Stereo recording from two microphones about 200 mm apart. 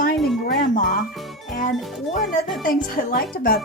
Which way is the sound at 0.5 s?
45° left (ahead or behind).